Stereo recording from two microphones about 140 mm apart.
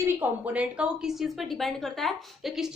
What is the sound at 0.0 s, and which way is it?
A woman's voice, 15° right (ahead or behind).